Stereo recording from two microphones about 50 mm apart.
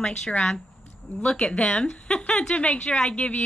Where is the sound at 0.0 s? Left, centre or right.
Centre.